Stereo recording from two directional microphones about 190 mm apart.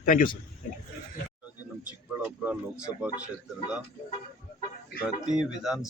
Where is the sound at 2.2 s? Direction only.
10° right (ahead or behind).